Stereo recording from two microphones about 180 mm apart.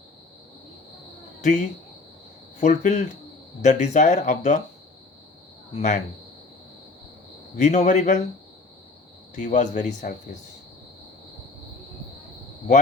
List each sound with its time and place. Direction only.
1.4 s speech: 40° left (ahead or behind)
5.7 s speech: 40° left (ahead or behind)
7.5 s speech: 40° left (ahead or behind)
9.4 s speech: 45° left (ahead or behind)